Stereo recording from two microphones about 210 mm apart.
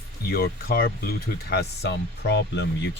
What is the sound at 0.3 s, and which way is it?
Speech, 45° left (ahead or behind).